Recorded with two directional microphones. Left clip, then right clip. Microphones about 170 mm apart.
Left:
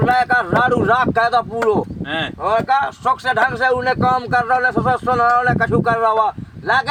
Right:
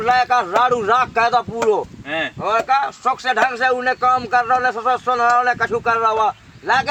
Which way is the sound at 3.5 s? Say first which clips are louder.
Left 1 dB; 20° left (ahead or behind).